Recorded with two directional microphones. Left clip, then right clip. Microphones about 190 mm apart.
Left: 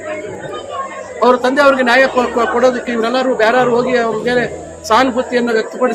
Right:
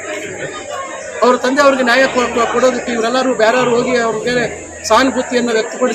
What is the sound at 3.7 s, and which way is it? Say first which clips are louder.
Speech: even; 25° left (ahead or behind).